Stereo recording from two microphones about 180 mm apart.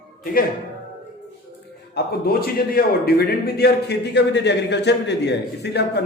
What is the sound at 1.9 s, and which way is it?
A man's voice, 55° left (ahead or behind).